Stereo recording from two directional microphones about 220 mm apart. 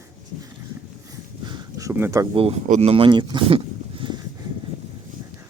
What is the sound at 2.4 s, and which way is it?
Speech, 30° right (ahead or behind).